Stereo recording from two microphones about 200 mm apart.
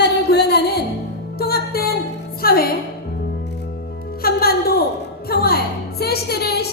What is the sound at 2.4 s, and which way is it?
Speech, 50° left (ahead or behind).